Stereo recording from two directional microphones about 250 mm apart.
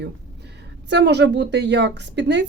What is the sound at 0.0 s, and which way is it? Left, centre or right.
Speech, right.